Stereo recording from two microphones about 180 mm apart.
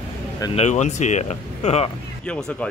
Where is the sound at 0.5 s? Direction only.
40° left (ahead or behind).